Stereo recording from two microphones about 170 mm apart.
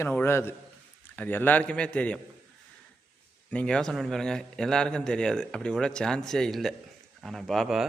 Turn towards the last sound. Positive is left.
turn(degrees=0)  # may be behind; listen again after turning